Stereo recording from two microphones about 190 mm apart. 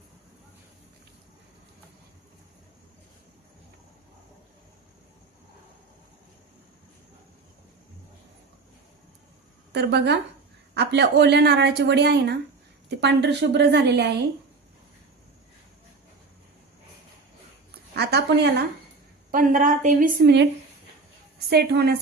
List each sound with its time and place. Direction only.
9.7 s speech: 60° right (ahead or behind)
17.9 s a woman's voice: 60° right (ahead or behind)
19.3 s a woman's voice: 45° right (ahead or behind)
20.2 s speech: 65° right (ahead or behind)
21.5 s speech: 55° right (ahead or behind)